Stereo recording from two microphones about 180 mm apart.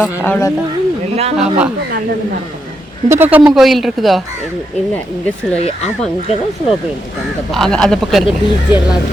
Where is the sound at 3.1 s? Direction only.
10° right (ahead or behind).